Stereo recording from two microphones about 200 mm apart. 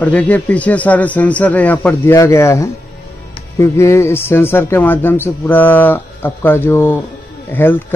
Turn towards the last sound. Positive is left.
turn(degrees=10)  # may be behind; listen again after turning